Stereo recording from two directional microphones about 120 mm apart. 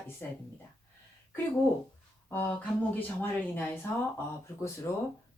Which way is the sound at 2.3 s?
15° left (ahead or behind).